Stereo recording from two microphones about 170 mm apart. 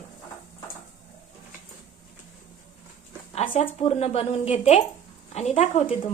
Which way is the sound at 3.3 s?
35° left (ahead or behind).